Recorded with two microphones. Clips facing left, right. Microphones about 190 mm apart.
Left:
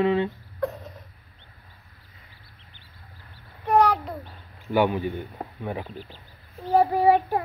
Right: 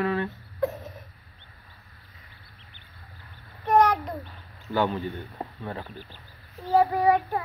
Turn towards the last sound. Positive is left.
turn(degrees=30)  # may be behind; listen again after turning